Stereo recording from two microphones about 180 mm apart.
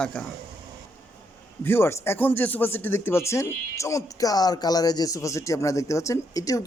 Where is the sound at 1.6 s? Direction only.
10° left (ahead or behind).